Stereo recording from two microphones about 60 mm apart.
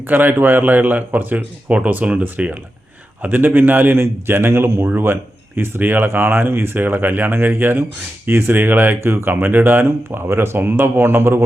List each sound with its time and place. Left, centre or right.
0.1 s speech: right
3.9 s speech: right